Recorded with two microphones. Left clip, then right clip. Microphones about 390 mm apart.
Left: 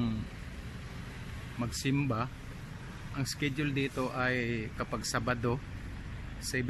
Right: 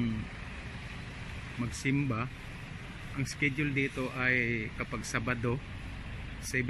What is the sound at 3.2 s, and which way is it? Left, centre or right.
Speech, centre.